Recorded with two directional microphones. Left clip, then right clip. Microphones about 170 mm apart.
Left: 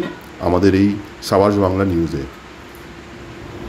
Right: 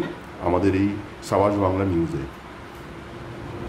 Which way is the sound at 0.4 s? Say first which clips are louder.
Left 6 dB; 20° left (ahead or behind).